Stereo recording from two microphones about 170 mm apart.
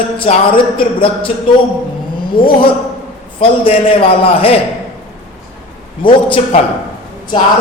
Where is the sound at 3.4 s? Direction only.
30° left (ahead or behind).